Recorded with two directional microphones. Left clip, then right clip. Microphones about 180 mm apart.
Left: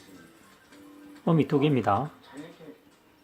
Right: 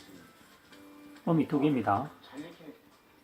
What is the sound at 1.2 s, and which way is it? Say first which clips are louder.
Speech: left 4 dB; 55° left (ahead or behind).